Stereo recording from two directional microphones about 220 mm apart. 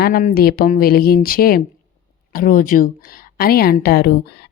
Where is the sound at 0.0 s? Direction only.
40° left (ahead or behind).